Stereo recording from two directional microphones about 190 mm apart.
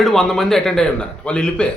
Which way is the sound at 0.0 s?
Centre (ahead or behind).